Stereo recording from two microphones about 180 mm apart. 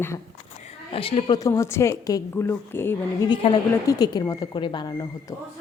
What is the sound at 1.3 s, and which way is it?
A woman's voice, 15° left (ahead or behind).